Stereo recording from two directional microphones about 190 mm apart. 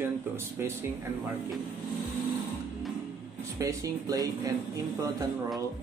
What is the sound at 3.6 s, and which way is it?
Speech, 15° right (ahead or behind).